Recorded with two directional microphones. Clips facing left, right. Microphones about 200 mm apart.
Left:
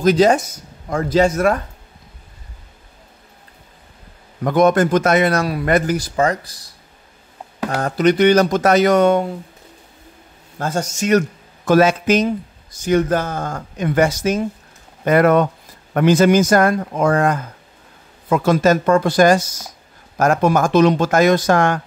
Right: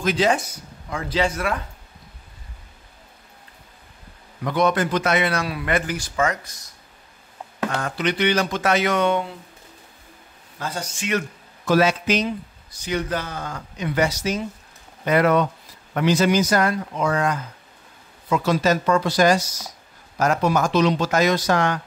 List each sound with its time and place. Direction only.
0.0 s a man's voice: 40° left (ahead or behind)
4.4 s a man's voice: 50° left (ahead or behind)
7.8 s a man's voice: 45° left (ahead or behind)
10.6 s a man's voice: 45° left (ahead or behind)